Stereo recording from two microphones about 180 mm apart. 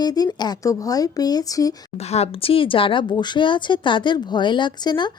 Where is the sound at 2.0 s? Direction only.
35° left (ahead or behind).